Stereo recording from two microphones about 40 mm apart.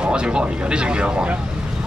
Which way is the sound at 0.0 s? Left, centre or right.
Right.